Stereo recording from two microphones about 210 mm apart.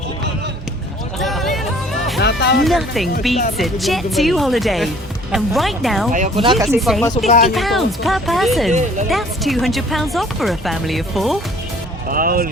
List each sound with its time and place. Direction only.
1.2 s music: centre (ahead or behind)
2.1 s music: 55° left (ahead or behind)
2.6 s speech: centre (ahead or behind)
6.1 s speech: 35° right (ahead or behind)
6.7 s speech: centre (ahead or behind)
7.3 s speech: 30° left (ahead or behind)
7.5 s speech: centre (ahead or behind)
8.7 s speech: 35° right (ahead or behind)
9.0 s speech: centre (ahead or behind)
12.0 s speech: 40° right (ahead or behind)